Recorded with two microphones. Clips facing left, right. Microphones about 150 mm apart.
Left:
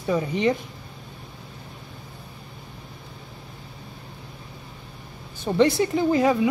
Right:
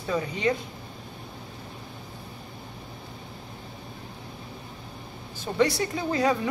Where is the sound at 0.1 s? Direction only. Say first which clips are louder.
Left 2 dB; 10° left (ahead or behind).